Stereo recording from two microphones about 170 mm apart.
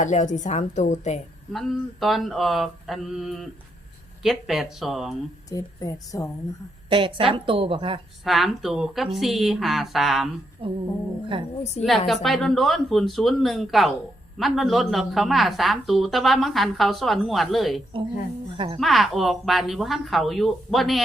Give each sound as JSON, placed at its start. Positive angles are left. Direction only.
{"t": 0.0, "sound": "a woman's voice", "side_deg": 45}
{"t": 1.5, "sound": "speech", "side_deg": 0}
{"t": 5.5, "sound": "a woman's voice", "side_deg": 20}
{"t": 6.9, "sound": "a woman's voice", "side_deg": -30}
{"t": 8.2, "sound": "speech", "side_deg": 0}
{"t": 10.6, "sound": "humming", "side_deg": -30}
{"t": 11.3, "sound": "a woman's voice", "side_deg": -30}
{"t": 11.8, "sound": "speech", "side_deg": 0}
{"t": 18.5, "sound": "a woman's voice", "side_deg": -30}
{"t": 18.8, "sound": "speech", "side_deg": 0}